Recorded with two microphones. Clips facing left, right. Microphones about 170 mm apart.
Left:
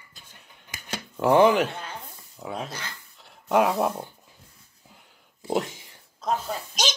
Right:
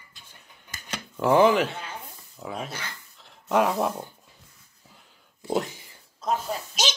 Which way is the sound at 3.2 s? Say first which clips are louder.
Left 1 dB; centre (ahead or behind).